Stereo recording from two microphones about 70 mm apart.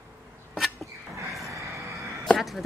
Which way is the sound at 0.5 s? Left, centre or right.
Centre.